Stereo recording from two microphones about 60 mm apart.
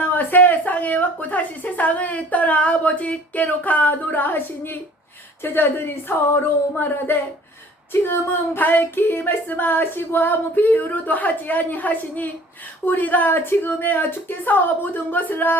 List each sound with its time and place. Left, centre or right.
0.0 s a woman's voice: left